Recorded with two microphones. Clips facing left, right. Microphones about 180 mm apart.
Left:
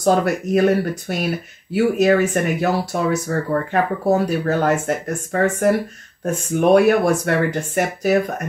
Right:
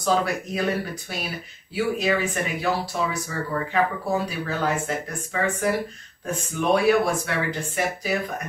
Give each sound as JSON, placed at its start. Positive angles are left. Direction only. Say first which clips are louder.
{"t": 0.0, "sound": "speech", "louder": "left 6 dB", "side_deg": 45}